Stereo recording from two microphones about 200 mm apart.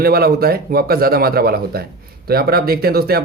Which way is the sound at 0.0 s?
50° right (ahead or behind).